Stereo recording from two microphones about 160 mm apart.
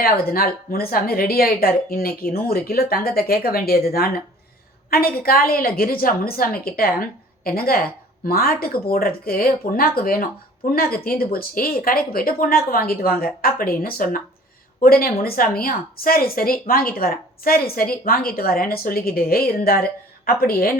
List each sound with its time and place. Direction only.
0.0 s a woman's voice: 65° left (ahead or behind)